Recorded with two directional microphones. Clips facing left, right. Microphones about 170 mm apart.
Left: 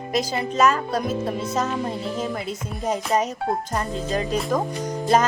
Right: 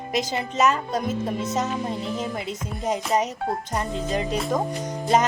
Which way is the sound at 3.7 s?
20° right (ahead or behind).